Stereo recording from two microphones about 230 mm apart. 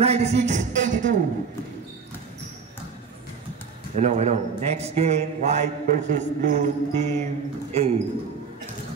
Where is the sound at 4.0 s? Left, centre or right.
Right.